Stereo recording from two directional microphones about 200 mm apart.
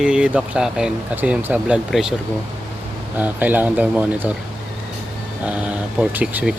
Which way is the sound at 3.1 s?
10° right (ahead or behind).